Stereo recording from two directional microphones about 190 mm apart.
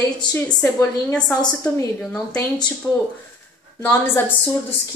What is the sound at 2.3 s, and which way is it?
A woman's voice, 20° left (ahead or behind).